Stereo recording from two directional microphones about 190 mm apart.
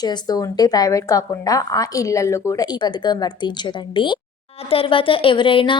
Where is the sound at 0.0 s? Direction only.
20° left (ahead or behind).